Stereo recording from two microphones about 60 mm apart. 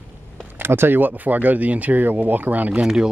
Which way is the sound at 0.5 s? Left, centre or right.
Right.